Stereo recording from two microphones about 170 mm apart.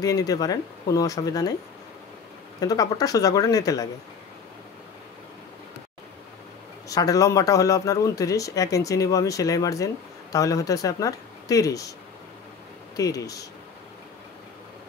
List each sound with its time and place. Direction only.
0.0 s speech: 20° left (ahead or behind)
2.6 s speech: 20° left (ahead or behind)
6.9 s speech: 20° left (ahead or behind)
12.9 s speech: 20° left (ahead or behind)